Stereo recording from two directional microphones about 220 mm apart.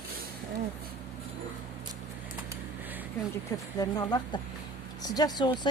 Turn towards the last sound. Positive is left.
turn(degrees=20)  # may be behind; listen again after turning